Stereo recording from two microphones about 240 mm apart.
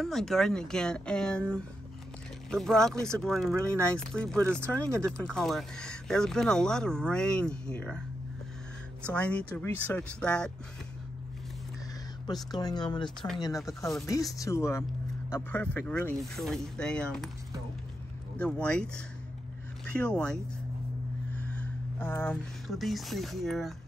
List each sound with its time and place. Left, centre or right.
0.0 s speech: centre
3.5 s speech: centre
3.9 s speech: centre
4.5 s speech: centre
5.1 s speech: centre
9.0 s speech: centre
12.4 s speech: centre
18.4 s speech: centre
21.4 s speech: centre